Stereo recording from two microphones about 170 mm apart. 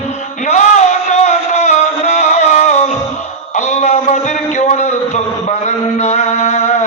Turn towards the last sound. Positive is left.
turn(degrees=45)  # may be behind; listen again after turning